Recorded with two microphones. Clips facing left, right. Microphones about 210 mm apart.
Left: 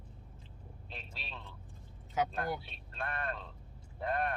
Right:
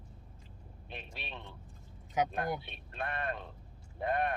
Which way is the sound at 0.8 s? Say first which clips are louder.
Right 4 dB; 20° right (ahead or behind).